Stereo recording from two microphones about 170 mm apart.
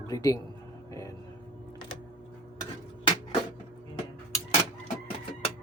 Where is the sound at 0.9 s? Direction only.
20° left (ahead or behind).